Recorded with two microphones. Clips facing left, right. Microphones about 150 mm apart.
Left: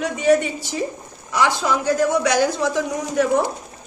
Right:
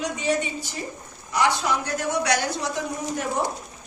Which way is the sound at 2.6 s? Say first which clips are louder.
Left 6 dB; 90° left.